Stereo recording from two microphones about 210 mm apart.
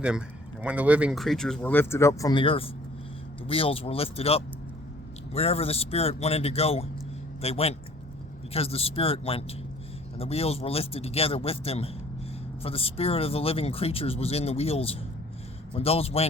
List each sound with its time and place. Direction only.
0.0 s speech: 5° right (ahead or behind); by 16.2 s 30° left (ahead or behind)